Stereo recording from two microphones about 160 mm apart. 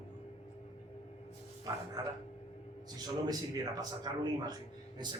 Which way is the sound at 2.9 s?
25° right (ahead or behind).